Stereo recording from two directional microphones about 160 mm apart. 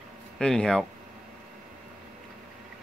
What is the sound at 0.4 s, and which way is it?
Speech, 5° left (ahead or behind).